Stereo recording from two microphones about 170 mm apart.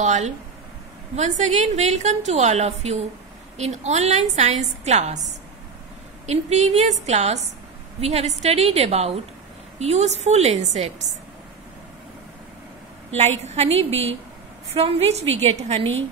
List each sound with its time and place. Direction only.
0.0 s a woman's voice: 45° right (ahead or behind)
13.4 s a woman's voice: 40° right (ahead or behind)